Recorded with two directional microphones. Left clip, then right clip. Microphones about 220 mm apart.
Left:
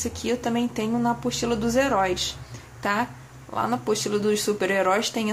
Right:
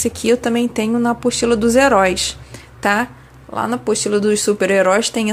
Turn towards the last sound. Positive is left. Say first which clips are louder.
# right 8 dB
turn(degrees=-20)  # may be behind; listen again after turning